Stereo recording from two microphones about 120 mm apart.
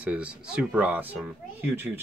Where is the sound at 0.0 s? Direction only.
10° right (ahead or behind).